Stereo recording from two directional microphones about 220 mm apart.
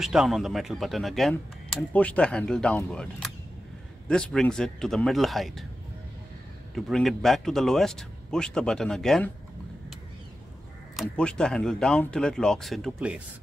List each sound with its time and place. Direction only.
0.0 s speech: centre (ahead or behind)
6.7 s speech: centre (ahead or behind)
11.0 s speech: 5° left (ahead or behind)